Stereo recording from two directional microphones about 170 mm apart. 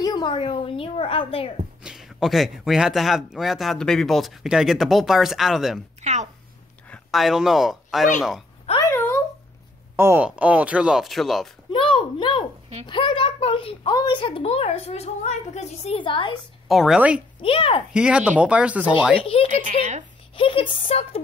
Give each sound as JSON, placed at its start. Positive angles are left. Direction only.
{"t": 0.0, "sound": "a woman's voice", "side_deg": 25}
{"t": 1.8, "sound": "speech", "side_deg": -5}
{"t": 6.0, "sound": "a sound", "side_deg": -40}
{"t": 6.9, "sound": "speech", "side_deg": 0}
{"t": 8.9, "sound": "a sound", "side_deg": 15}
{"t": 9.9, "sound": "speech", "side_deg": -10}
{"t": 11.7, "sound": "a sound", "side_deg": 30}
{"t": 12.8, "sound": "a woman's voice", "side_deg": 30}
{"t": 16.6, "sound": "speech", "side_deg": 0}
{"t": 17.4, "sound": "a woman's voice", "side_deg": 30}
{"t": 17.9, "sound": "speech", "side_deg": -5}
{"t": 19.2, "sound": "a woman's voice", "side_deg": 30}
{"t": 19.6, "sound": "speech", "side_deg": -45}
{"t": 20.3, "sound": "a woman's voice", "side_deg": 30}